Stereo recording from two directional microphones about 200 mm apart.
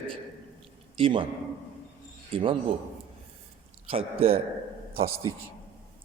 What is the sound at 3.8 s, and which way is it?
Speech, 30° right (ahead or behind).